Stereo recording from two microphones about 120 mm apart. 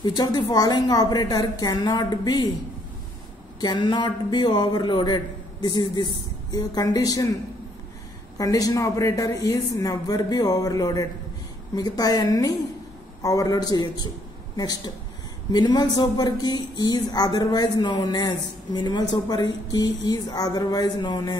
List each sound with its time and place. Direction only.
0.0 s speech: 35° left (ahead or behind)
3.6 s speech: 35° left (ahead or behind)
8.4 s a man's voice: 30° left (ahead or behind)
15.5 s speech: 35° left (ahead or behind)